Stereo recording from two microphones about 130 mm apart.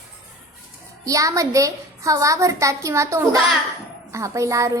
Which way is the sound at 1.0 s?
25° right (ahead or behind).